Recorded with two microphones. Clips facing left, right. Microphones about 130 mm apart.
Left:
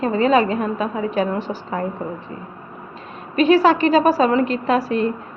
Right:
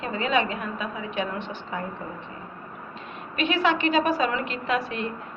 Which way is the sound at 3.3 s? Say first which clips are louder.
Left 10 dB; 35° left (ahead or behind).